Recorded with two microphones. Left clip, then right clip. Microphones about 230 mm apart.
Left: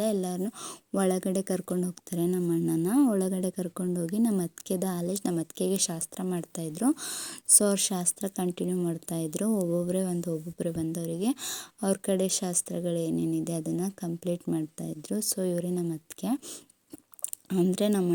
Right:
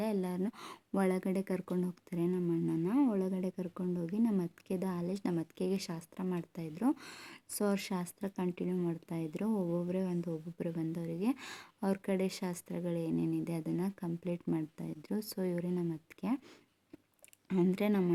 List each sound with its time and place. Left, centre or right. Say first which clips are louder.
0.0 s speech: left 7 dB; centre